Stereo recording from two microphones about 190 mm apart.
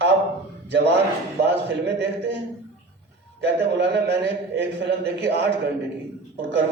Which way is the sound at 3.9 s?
60° right (ahead or behind).